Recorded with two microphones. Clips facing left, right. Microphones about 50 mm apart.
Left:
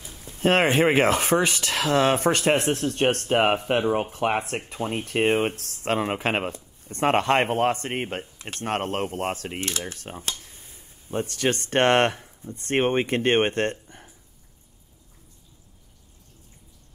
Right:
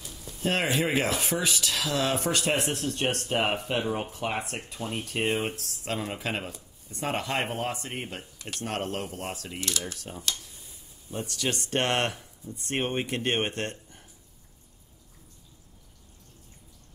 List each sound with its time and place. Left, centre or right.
0.1 s speech: left
10.4 s speech: left